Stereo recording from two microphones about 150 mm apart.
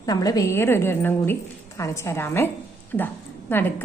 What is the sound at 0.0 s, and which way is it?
A woman's voice, 25° left (ahead or behind).